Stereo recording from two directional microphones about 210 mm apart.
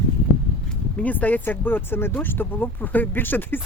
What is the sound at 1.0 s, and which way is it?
Speech, 5° left (ahead or behind).